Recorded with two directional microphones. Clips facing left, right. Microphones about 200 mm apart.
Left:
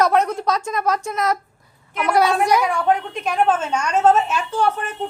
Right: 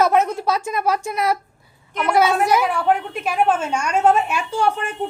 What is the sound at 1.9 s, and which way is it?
A woman's voice, centre (ahead or behind).